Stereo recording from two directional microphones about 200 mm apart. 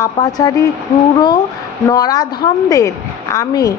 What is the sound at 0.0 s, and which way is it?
Speech, 20° left (ahead or behind).